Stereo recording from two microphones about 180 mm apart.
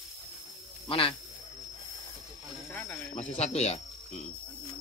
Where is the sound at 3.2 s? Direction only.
40° left (ahead or behind).